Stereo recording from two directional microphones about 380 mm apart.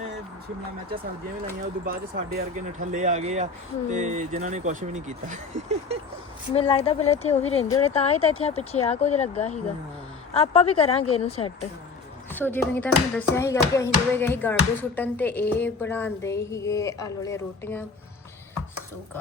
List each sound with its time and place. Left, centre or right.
1.8 s speech: right
6.5 s speech: centre
12.3 s speech: centre